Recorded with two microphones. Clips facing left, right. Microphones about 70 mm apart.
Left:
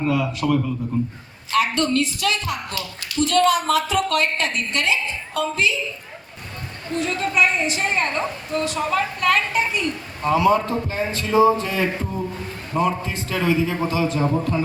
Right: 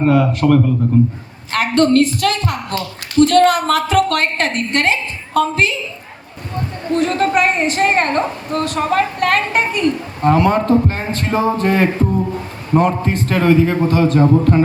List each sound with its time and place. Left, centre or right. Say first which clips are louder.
0.0 s a man's voice: right 8 dB; right
6.9 s a woman's voice: right 7 dB; right